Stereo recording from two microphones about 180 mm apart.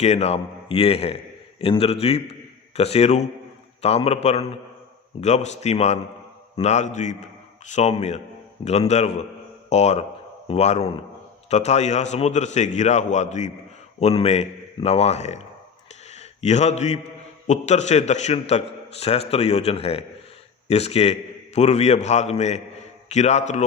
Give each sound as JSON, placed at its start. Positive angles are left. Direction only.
{"t": 0.0, "sound": "a man's voice", "side_deg": 35}